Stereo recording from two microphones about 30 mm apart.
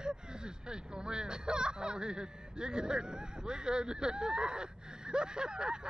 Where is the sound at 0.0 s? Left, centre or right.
Right.